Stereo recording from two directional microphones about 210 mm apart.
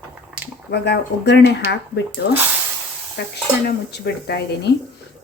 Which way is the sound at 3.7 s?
50° left (ahead or behind).